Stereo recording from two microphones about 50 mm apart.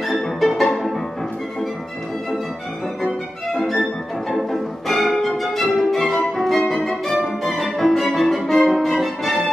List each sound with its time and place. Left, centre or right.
0.1 s music: centre
3.0 s violin: centre
6.3 s music: centre